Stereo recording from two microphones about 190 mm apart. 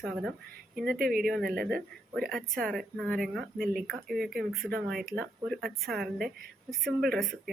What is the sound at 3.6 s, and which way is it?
Speech, 50° right (ahead or behind).